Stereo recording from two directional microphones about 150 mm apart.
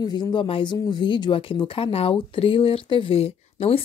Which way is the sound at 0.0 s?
30° left (ahead or behind).